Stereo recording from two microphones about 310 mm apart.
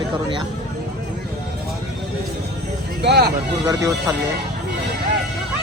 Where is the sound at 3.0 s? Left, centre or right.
Right.